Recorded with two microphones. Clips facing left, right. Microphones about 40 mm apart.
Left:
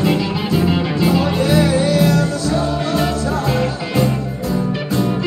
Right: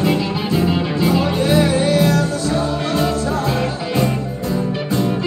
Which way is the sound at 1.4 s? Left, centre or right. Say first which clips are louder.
Even; centre.